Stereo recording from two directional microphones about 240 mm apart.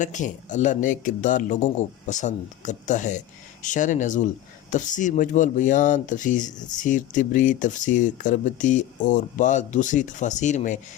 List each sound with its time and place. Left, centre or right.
0.0 s speech: left